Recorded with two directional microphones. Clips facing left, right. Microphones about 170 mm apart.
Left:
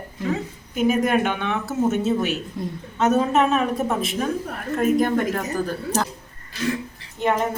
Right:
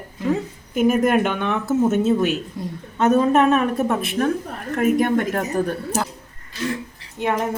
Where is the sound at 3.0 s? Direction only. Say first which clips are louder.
Right 3 dB; 55° right (ahead or behind).